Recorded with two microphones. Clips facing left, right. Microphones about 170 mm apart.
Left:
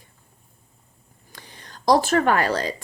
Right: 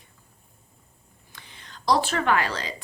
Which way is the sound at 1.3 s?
40° left (ahead or behind).